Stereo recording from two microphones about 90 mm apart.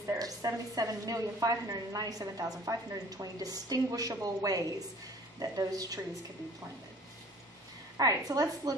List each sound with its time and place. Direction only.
0.0 s a woman's voice: 35° right (ahead or behind)
8.0 s a woman's voice: 40° right (ahead or behind)